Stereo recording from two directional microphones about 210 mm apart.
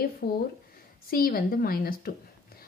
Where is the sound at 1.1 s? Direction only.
45° left (ahead or behind).